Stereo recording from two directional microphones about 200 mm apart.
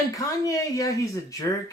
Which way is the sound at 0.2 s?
15° left (ahead or behind).